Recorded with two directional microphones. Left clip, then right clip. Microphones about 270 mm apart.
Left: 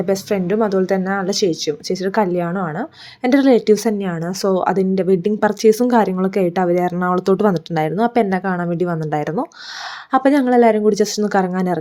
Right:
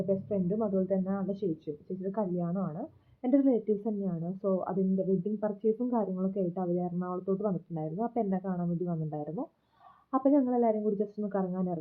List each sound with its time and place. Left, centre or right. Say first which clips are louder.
0.1 s speech: left 13 dB; left